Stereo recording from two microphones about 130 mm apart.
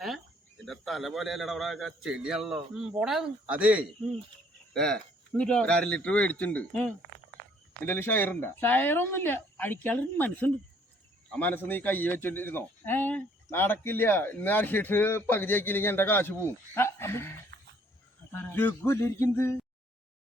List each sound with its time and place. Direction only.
0.6 s a man's voice: centre (ahead or behind)
4.7 s speech: 5° left (ahead or behind)